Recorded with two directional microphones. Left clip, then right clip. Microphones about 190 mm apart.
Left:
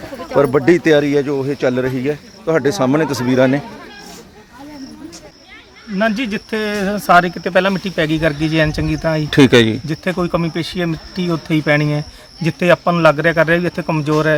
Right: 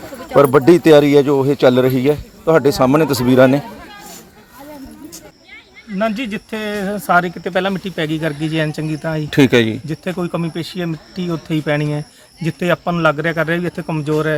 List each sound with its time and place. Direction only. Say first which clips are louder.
0.3 s speech: right 3 dB; 10° right (ahead or behind)
6.0 s speech: left 2 dB; centre (ahead or behind)